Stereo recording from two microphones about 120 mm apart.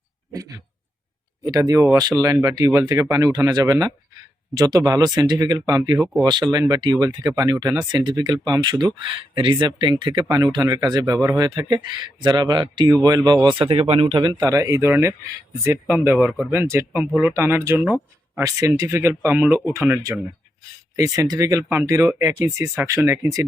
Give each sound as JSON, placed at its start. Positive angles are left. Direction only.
{"t": 0.3, "sound": "speech", "side_deg": -30}
{"t": 13.6, "sound": "speech", "side_deg": -50}
{"t": 14.2, "sound": "speech", "side_deg": -40}
{"t": 16.5, "sound": "speech", "side_deg": -20}